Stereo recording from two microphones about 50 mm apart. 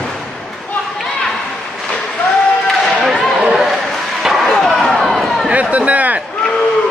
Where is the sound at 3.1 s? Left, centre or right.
Centre.